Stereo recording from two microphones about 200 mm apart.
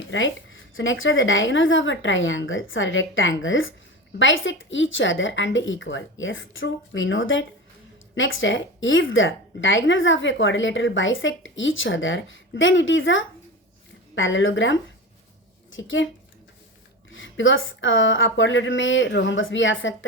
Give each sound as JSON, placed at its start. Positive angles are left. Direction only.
{"t": 0.1, "sound": "a woman's voice", "side_deg": 75}
{"t": 17.1, "sound": "a woman's voice", "side_deg": 70}